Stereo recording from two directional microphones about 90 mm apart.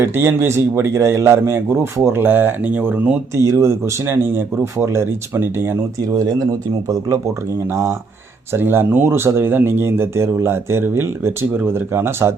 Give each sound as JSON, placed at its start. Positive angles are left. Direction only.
{"t": 0.0, "sound": "speech", "side_deg": -25}
{"t": 3.3, "sound": "speech", "side_deg": -35}
{"t": 6.0, "sound": "speech", "side_deg": -45}
{"t": 7.7, "sound": "speech", "side_deg": -25}